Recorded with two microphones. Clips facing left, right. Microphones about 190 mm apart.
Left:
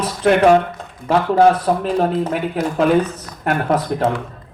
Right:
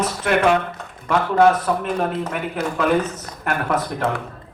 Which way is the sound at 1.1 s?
30° left (ahead or behind).